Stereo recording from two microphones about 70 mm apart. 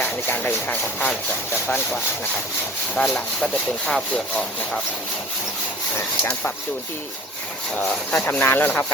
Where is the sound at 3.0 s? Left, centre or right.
Centre.